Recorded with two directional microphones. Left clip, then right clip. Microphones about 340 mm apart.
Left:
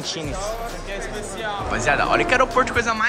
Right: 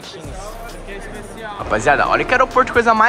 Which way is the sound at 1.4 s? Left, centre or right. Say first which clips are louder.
Right 5 dB; centre.